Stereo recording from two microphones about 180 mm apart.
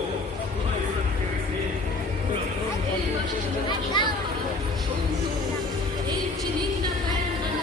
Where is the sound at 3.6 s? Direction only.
25° left (ahead or behind).